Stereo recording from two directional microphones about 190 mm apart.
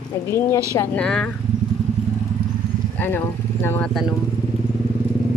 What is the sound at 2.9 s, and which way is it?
Speech, 10° left (ahead or behind).